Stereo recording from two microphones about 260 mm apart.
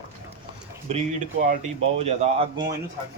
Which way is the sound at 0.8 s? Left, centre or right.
Right.